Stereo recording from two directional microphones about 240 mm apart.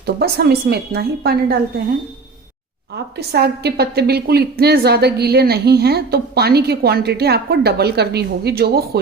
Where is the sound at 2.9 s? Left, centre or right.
Right.